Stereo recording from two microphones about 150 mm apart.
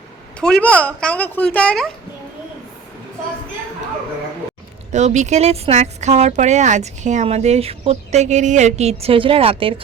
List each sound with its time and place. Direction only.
0.6 s a woman's voice: 10° left (ahead or behind)
4.9 s speech: 50° right (ahead or behind)